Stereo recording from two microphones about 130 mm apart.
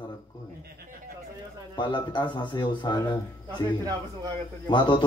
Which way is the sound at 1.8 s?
35° left (ahead or behind).